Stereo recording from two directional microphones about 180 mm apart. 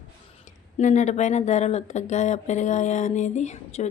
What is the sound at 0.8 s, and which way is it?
Speech, 40° left (ahead or behind).